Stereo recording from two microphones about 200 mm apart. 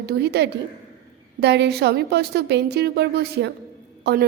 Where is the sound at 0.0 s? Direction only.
55° right (ahead or behind).